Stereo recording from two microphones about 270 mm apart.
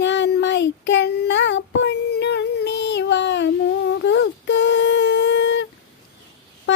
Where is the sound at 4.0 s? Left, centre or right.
Left.